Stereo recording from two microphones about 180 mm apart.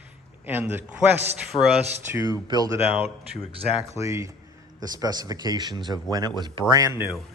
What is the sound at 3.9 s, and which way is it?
A man's voice, 15° right (ahead or behind).